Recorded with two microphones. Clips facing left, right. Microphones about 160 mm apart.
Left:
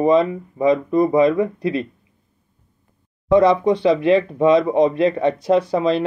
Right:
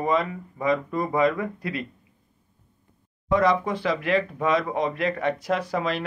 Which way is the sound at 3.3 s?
20° left (ahead or behind).